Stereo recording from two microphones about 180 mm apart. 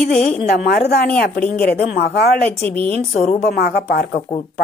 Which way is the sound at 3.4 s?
65° left (ahead or behind).